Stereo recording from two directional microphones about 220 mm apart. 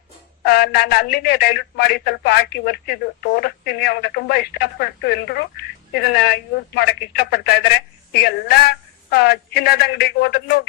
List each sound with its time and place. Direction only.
0.4 s speech: 45° left (ahead or behind)